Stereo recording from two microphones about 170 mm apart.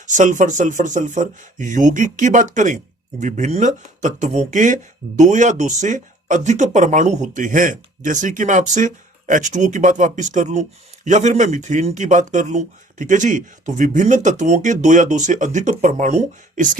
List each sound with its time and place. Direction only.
0.0 s speech: 45° right (ahead or behind)